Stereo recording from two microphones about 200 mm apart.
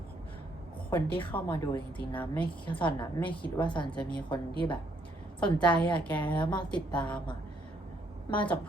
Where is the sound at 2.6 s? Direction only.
25° left (ahead or behind).